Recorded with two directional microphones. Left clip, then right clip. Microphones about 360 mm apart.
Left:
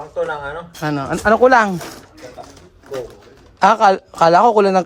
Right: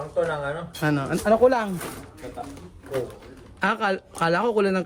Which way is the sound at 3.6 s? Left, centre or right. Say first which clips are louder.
Left 12 dB; centre.